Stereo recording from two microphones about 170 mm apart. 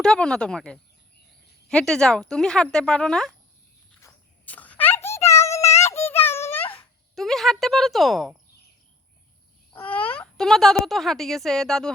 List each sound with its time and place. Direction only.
0.0 s speech: 5° left (ahead or behind)
4.0 s a sound: 10° left (ahead or behind)
5.3 s child singing: 15° left (ahead or behind)
7.2 s speech: centre (ahead or behind)
9.7 s speech: 10° left (ahead or behind)